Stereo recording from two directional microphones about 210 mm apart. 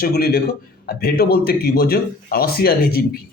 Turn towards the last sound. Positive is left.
turn(degrees=50)  # may be behind; listen again after turning